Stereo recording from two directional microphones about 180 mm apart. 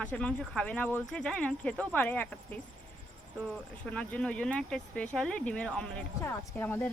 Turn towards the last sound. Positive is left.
turn(degrees=10)  # may be behind; listen again after turning